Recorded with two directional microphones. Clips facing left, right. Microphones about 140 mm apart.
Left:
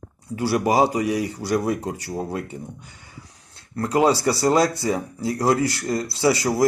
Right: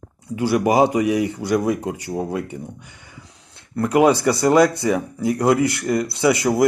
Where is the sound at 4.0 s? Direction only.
20° right (ahead or behind).